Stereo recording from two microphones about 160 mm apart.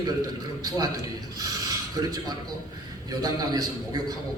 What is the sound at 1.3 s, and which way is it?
Filing, 25° right (ahead or behind).